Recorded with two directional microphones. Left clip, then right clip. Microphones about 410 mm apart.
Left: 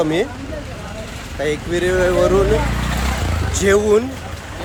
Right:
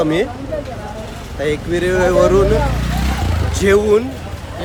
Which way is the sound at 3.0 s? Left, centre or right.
Centre.